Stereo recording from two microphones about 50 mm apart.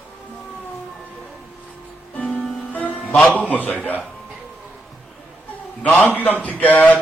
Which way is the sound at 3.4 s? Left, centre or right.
Left.